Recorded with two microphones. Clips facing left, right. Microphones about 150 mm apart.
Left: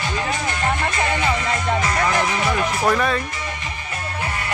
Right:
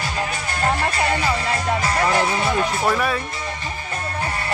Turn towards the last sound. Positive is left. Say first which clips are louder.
# left 1 dB
turn(degrees=-5)  # may be behind; listen again after turning